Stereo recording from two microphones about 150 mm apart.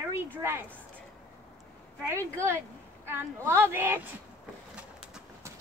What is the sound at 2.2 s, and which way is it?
Speech, 15° right (ahead or behind).